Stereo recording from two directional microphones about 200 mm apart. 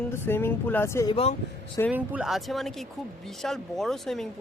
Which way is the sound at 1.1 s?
30° left (ahead or behind).